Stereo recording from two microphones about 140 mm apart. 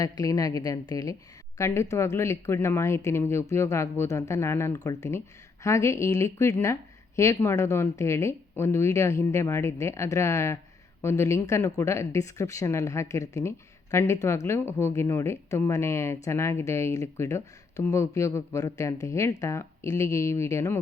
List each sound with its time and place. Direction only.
0.0 s speech: 25° left (ahead or behind)